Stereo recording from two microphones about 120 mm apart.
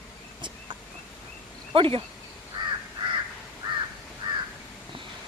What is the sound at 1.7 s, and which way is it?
Speech, 50° right (ahead or behind).